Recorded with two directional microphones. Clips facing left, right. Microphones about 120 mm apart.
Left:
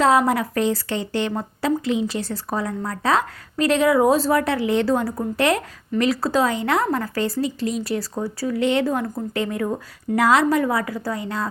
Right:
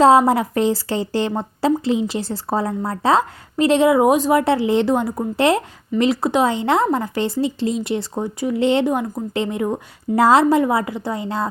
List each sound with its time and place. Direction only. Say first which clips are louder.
0.0 s a woman's voice: right 5 dB; 30° right (ahead or behind)